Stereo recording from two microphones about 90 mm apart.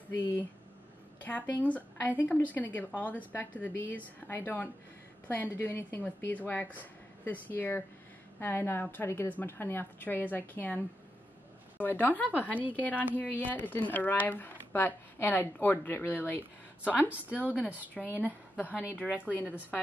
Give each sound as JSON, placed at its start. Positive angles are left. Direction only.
{"t": 1.2, "sound": "a woman's voice", "side_deg": 20}
{"t": 11.8, "sound": "speech", "side_deg": 20}
{"t": 16.8, "sound": "a woman's voice", "side_deg": -15}
{"t": 17.4, "sound": "speech", "side_deg": 20}
{"t": 18.0, "sound": "a woman's voice", "side_deg": 0}
{"t": 18.7, "sound": "a woman's voice", "side_deg": -15}
{"t": 19.3, "sound": "speech", "side_deg": 20}